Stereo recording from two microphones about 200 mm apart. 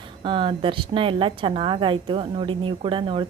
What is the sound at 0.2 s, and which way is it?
A woman's voice, 25° right (ahead or behind).